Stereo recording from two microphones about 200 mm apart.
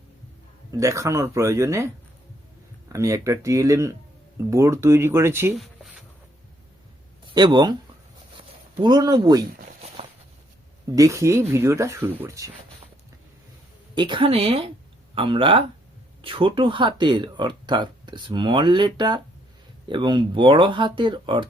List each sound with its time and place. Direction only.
0.7 s speech: 15° right (ahead or behind)
2.9 s speech: 15° right (ahead or behind)
5.5 s a sound: centre (ahead or behind)
7.3 s speech: 20° right (ahead or behind)
9.6 s walk: 30° right (ahead or behind)
10.8 s speech: 15° right (ahead or behind)
13.9 s speech: 25° right (ahead or behind)